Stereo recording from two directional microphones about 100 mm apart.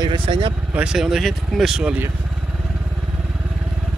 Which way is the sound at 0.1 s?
60° right (ahead or behind).